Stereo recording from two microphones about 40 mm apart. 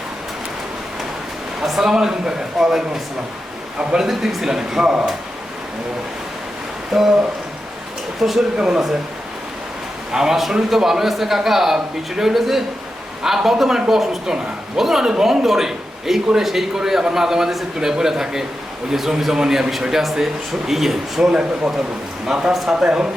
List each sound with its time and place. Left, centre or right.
1.8 s a man's voice: centre
4.1 s a man's voice: centre
6.9 s speech: centre
8.2 s a man's voice: centre
8.5 s speech: centre
10.1 s a man's voice: centre
22.3 s a man's voice: centre